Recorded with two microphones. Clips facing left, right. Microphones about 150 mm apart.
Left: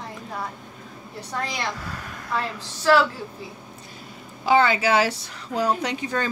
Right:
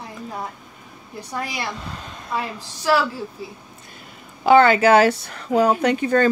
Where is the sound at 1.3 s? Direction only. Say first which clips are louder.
Right 1 dB; 10° right (ahead or behind).